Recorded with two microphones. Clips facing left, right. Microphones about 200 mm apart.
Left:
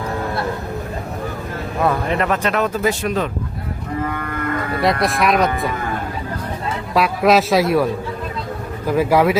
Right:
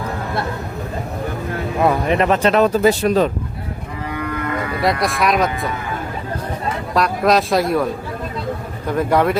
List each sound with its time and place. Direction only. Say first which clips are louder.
1.9 s speech: right 3 dB; 20° right (ahead or behind)
4.0 s cattle: right 2 dB; 50° left (ahead or behind)
4.8 s speech: left 1 dB; centre (ahead or behind)
6.9 s speech: left 1 dB; 5° left (ahead or behind)
8.9 s speech: left 2 dB; 5° left (ahead or behind)